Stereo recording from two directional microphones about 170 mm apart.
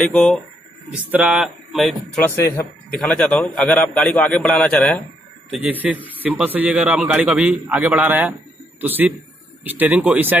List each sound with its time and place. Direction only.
0.0 s a man's voice: centre (ahead or behind)
0.9 s a man's voice: 10° right (ahead or behind)
2.2 s speech: 15° left (ahead or behind)
2.9 s a man's voice: 5° left (ahead or behind)
5.5 s a man's voice: 10° right (ahead or behind)